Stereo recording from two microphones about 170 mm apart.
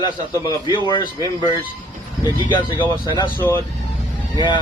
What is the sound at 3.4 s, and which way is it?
Speech, 10° left (ahead or behind).